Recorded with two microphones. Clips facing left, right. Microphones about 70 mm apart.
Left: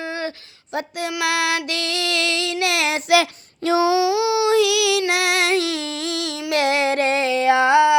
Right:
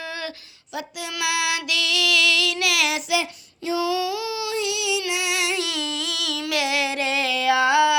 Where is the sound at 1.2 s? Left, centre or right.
Left.